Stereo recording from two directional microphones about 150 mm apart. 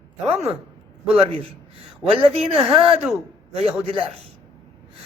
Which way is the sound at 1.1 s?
40° right (ahead or behind).